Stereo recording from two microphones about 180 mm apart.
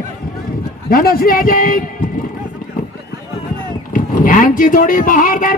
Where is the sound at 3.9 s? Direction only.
45° left (ahead or behind).